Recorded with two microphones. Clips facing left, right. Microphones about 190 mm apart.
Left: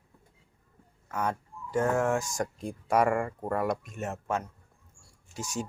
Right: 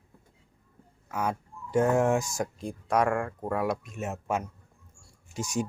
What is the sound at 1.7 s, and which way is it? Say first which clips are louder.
Speech: right 3 dB; 15° right (ahead or behind).